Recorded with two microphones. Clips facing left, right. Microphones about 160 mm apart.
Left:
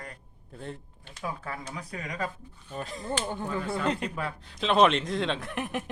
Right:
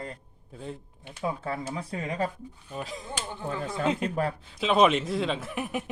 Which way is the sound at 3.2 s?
45° left (ahead or behind).